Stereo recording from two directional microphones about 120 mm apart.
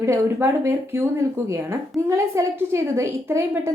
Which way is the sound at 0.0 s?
25° right (ahead or behind).